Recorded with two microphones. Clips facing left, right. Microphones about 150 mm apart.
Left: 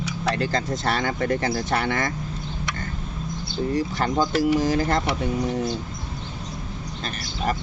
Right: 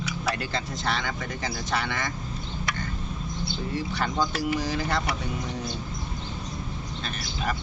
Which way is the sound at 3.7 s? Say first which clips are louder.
Left 4 dB; 45° left (ahead or behind).